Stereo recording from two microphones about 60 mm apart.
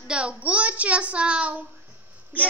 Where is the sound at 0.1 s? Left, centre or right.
Centre.